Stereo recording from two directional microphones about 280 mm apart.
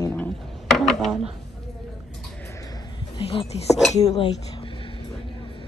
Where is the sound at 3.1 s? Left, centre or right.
Centre.